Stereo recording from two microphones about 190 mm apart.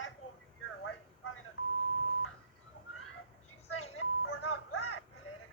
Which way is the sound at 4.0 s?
90° left.